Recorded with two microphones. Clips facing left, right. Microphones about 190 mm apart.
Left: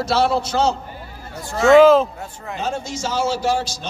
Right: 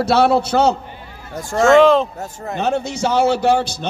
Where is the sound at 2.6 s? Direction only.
65° right (ahead or behind).